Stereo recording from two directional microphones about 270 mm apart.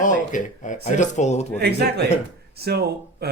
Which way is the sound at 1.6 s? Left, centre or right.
Right.